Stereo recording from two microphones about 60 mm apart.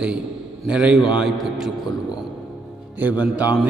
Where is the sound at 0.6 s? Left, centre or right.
Centre.